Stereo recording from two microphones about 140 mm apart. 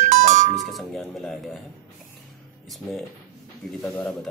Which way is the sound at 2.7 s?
Centre (ahead or behind).